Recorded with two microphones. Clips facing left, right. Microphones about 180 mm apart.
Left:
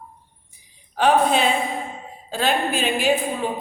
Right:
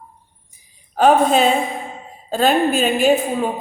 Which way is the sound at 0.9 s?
45° right (ahead or behind).